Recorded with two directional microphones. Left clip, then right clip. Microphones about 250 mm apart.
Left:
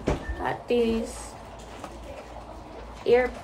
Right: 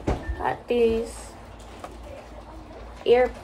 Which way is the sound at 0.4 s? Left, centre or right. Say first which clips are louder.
Right 2 dB; centre.